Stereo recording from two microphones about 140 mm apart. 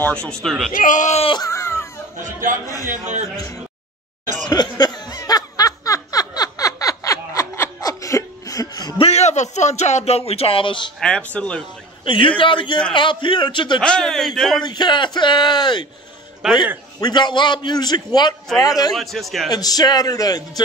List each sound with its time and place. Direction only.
0.0 s a man's voice: 5° left (ahead or behind)
0.7 s speech: 65° left (ahead or behind)
1.4 s speech: 20° left (ahead or behind)
2.9 s a man's voice: 55° right (ahead or behind)
4.5 s laughter: 30° left (ahead or behind)
9.0 s speech: 50° left (ahead or behind)
11.0 s speech: 5° left (ahead or behind)
12.0 s a man's voice: 35° left (ahead or behind)
13.7 s a man's voice: 5° left (ahead or behind)
14.6 s a man's voice: 30° left (ahead or behind)
16.4 s a man's voice: 5° right (ahead or behind)
17.0 s a man's voice: 30° left (ahead or behind)
18.9 s a man's voice: centre (ahead or behind)
19.5 s speech: 25° left (ahead or behind)